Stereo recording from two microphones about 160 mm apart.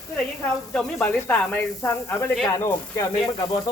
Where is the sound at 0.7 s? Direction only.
10° left (ahead or behind).